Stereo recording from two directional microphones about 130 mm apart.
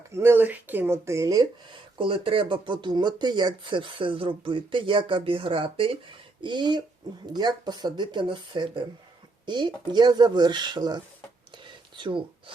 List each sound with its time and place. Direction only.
0.1 s speech: 20° right (ahead or behind)
2.0 s speech: 40° right (ahead or behind)
11.5 s a sound: 40° right (ahead or behind)